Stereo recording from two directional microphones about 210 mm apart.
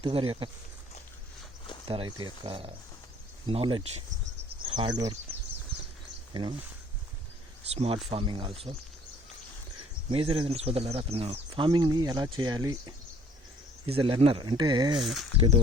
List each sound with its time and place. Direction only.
0.0 s speech: 25° right (ahead or behind)
1.9 s speech: 25° right (ahead or behind)
7.7 s speech: 30° right (ahead or behind)
10.1 s speech: 25° right (ahead or behind)
13.8 s speech: 25° right (ahead or behind)
14.9 s speech: centre (ahead or behind)
15.4 s speech: 25° right (ahead or behind)